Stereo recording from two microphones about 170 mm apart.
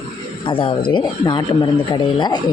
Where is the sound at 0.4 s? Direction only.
30° left (ahead or behind).